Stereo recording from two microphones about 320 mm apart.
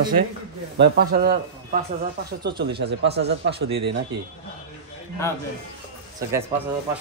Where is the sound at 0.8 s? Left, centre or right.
Right.